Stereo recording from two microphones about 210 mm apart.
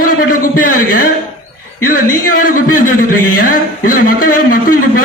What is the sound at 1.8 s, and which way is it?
Speech, 40° left (ahead or behind).